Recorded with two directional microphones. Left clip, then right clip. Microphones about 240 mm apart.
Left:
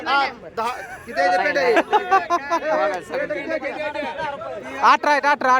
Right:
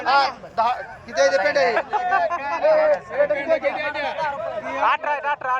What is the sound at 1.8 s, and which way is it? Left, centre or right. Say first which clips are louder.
Speech: left 3 dB; left.